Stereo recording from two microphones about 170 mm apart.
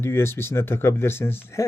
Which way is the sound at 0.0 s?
15° left (ahead or behind).